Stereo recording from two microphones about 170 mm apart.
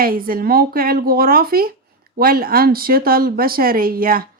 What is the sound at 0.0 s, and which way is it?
Speech, 60° right (ahead or behind).